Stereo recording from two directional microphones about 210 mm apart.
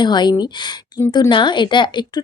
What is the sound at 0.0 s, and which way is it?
A woman's voice, 20° left (ahead or behind).